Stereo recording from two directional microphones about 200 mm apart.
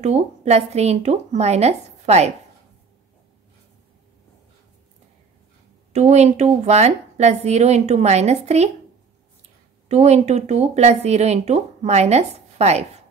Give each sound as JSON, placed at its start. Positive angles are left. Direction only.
{"t": 0.0, "sound": "speech", "side_deg": -35}
{"t": 5.9, "sound": "speech", "side_deg": -35}
{"t": 9.8, "sound": "speech", "side_deg": -35}